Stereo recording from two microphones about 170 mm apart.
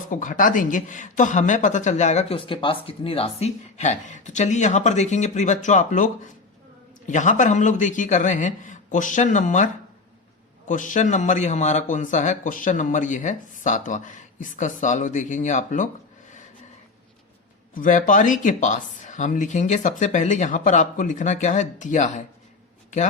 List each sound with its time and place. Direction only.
0.1 s speech: 50° left (ahead or behind)
7.1 s speech: 45° left (ahead or behind)
10.7 s speech: 50° left (ahead or behind)
17.7 s speech: 50° left (ahead or behind)